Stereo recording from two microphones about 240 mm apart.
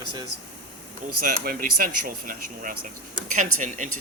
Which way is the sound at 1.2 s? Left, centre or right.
Right.